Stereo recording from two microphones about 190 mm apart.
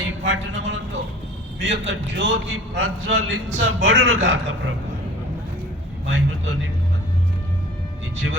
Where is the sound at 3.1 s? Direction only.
80° right.